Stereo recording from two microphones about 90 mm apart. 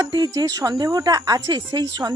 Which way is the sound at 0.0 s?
45° right (ahead or behind).